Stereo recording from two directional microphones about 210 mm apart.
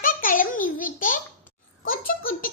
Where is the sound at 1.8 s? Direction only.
45° left (ahead or behind).